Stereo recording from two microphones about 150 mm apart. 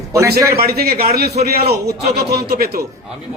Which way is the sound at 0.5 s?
90° right.